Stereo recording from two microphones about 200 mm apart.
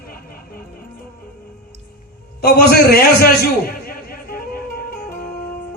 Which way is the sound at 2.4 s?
50° left (ahead or behind).